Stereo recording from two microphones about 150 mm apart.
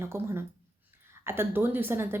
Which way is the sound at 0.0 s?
15° right (ahead or behind).